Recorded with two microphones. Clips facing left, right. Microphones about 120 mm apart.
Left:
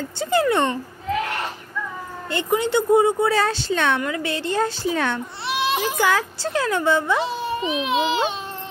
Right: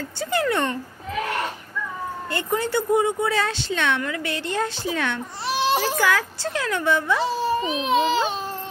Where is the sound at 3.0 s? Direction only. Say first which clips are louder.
Left 4 dB; 35° left (ahead or behind).